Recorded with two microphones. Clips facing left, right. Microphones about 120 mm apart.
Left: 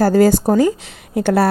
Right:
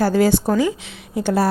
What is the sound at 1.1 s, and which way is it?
Speech, 60° left (ahead or behind).